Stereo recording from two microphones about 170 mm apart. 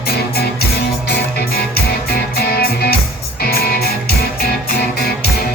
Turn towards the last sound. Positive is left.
turn(degrees=65)  # may be behind; listen again after turning